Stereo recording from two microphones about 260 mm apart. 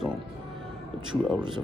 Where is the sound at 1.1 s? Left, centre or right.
Centre.